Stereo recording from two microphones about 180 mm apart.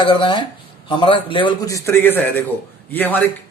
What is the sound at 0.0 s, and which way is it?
A man's voice, 30° left (ahead or behind).